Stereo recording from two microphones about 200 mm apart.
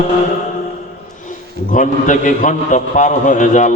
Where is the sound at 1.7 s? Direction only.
40° left (ahead or behind).